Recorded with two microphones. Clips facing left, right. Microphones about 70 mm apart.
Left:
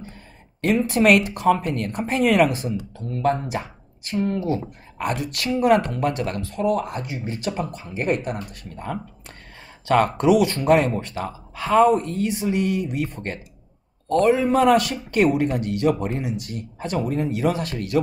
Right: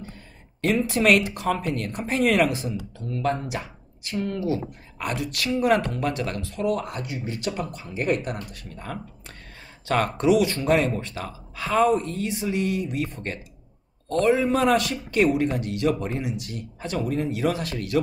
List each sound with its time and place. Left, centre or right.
0.8 s speech: left